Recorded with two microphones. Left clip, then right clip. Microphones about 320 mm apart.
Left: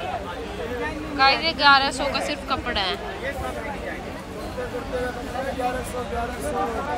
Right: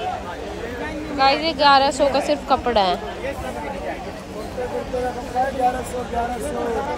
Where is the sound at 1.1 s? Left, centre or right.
Centre.